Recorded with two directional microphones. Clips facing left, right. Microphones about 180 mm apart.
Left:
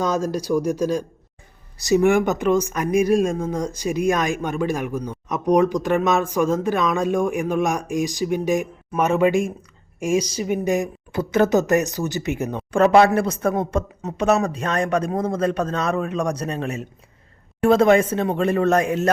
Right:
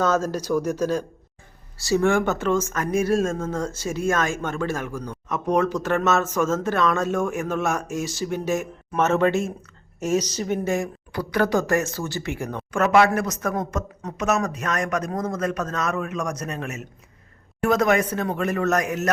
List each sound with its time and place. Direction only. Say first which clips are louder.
0.0 s speech: even; 15° left (ahead or behind); by 19.1 s 30° left (ahead or behind)